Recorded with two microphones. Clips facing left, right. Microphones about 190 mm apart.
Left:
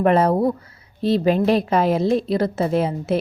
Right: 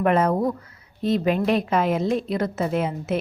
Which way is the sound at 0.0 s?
30° left (ahead or behind).